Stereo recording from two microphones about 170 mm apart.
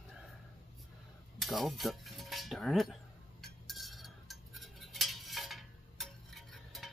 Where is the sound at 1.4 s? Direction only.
Centre (ahead or behind).